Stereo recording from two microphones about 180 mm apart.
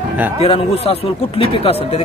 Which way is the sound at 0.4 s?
35° left (ahead or behind).